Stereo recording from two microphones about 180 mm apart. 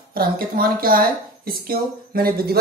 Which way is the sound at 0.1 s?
55° right (ahead or behind).